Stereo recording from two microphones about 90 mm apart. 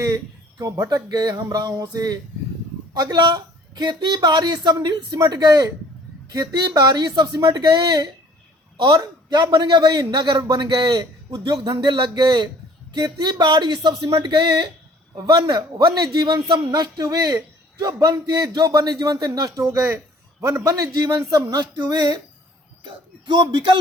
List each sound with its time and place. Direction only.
0.6 s a man's voice: 45° right (ahead or behind)
20.7 s a man's voice: 45° right (ahead or behind)
23.2 s a man's voice: 55° right (ahead or behind)